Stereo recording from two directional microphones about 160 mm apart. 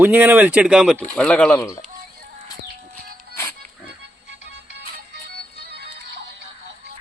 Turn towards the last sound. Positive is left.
turn(degrees=-90)